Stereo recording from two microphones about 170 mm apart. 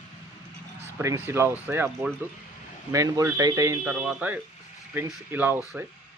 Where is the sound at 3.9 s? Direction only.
5° right (ahead or behind).